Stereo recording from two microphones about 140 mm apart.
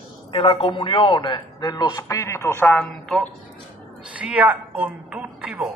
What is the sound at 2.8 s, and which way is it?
Speech, 5° left (ahead or behind).